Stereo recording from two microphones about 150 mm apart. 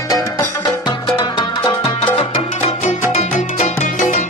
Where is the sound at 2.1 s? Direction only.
45° left (ahead or behind).